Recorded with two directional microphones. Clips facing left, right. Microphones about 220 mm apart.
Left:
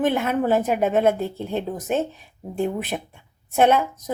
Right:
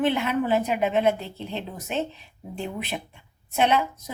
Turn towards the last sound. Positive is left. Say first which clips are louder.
# left 5 dB
turn(degrees=50)  # may be behind; listen again after turning